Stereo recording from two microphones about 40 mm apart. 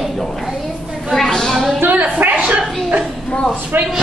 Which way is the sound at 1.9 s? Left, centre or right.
Right.